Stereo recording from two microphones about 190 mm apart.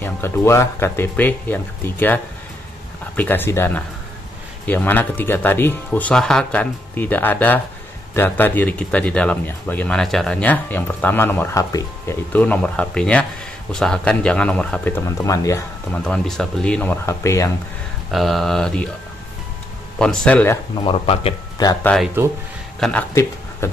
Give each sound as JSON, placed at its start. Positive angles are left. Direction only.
{"t": 0.0, "sound": "a man's voice", "side_deg": 15}
{"t": 16.0, "sound": "speech", "side_deg": 5}
{"t": 18.1, "sound": "a man's voice", "side_deg": 0}
{"t": 20.0, "sound": "speech", "side_deg": 5}
{"t": 20.8, "sound": "speech", "side_deg": 25}
{"t": 21.8, "sound": "a man's voice", "side_deg": 0}
{"t": 23.6, "sound": "a sound", "side_deg": 15}